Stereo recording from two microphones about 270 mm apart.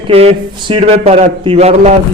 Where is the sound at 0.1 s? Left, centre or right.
Right.